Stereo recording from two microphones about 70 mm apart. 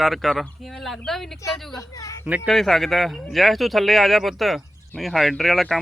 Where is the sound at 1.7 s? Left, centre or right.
Left.